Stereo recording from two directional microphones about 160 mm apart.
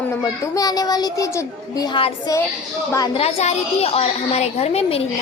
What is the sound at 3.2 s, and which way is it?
A woman's voice, 45° left (ahead or behind).